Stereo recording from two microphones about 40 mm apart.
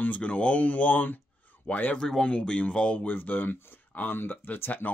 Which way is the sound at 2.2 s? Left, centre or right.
Left.